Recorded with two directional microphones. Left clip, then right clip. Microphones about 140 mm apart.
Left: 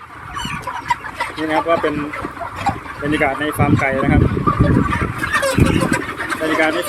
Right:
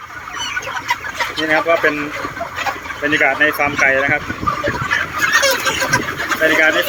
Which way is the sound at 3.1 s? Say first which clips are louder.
Right 4 dB; 10° left (ahead or behind).